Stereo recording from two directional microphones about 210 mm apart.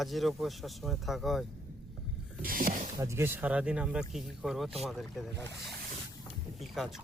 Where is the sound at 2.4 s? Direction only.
40° right (ahead or behind).